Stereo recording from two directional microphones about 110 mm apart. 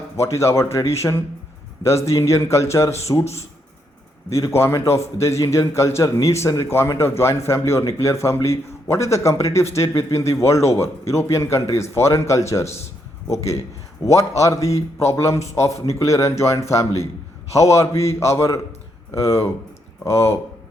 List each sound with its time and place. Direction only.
0.2 s a man's voice: 25° left (ahead or behind)
4.3 s a man's voice: 30° left (ahead or behind)